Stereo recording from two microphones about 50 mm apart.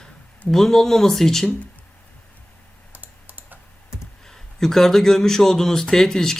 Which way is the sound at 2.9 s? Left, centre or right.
Right.